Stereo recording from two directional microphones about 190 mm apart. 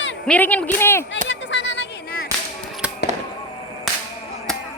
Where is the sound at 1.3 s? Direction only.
70° left (ahead or behind).